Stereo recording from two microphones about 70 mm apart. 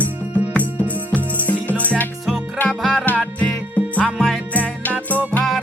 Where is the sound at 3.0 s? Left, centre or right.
Left.